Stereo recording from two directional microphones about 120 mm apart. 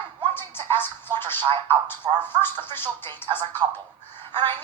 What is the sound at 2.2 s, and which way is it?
Speech, 15° left (ahead or behind).